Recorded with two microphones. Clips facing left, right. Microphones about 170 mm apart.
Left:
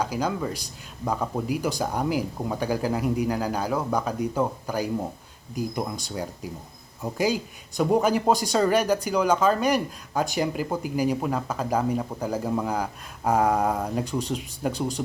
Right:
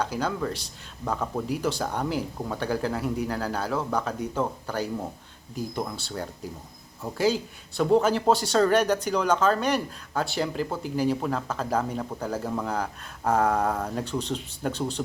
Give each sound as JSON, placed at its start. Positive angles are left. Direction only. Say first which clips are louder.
{"t": 0.0, "sound": "speech", "louder": "left 1 dB", "side_deg": 10}